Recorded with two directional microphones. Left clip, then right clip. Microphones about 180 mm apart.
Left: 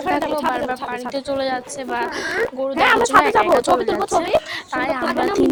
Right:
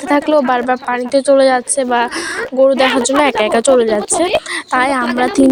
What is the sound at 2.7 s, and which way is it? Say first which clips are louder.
Speech: right 3 dB; centre (ahead or behind).